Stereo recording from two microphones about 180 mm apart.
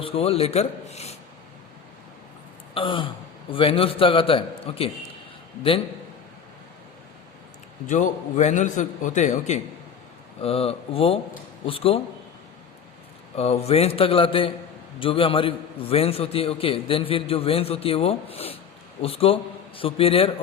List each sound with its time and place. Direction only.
0.0 s a man's voice: 30° left (ahead or behind)
2.7 s a man's voice: 30° left (ahead or behind)
7.9 s a man's voice: 45° left (ahead or behind)
13.3 s a man's voice: 35° left (ahead or behind)